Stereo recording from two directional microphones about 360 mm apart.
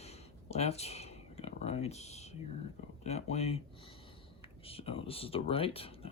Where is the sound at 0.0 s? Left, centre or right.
Centre.